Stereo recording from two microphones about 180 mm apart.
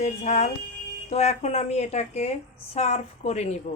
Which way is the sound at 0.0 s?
40° left (ahead or behind).